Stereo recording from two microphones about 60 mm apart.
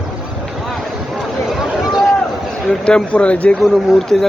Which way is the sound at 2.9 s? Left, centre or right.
Centre.